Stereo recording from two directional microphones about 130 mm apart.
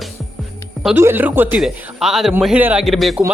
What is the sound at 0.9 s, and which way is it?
Speech, 15° right (ahead or behind).